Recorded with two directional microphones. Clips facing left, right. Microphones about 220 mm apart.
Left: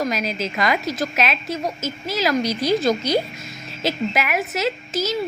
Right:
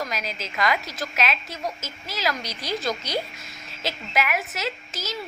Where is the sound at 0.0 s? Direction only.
15° left (ahead or behind).